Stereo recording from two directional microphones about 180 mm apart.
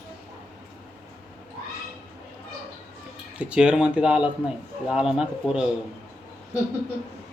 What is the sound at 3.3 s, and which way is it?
A man's voice, 5° right (ahead or behind).